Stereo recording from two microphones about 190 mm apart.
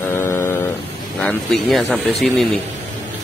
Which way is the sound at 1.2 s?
5° left (ahead or behind).